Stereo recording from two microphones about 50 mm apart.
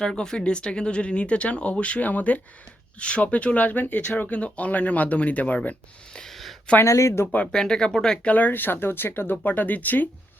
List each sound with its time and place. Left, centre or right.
0.0 s speech: centre; by 5.5 s left
6.2 s a sound: centre
6.8 s speech: left
7.5 s speech: centre
8.3 s speech: left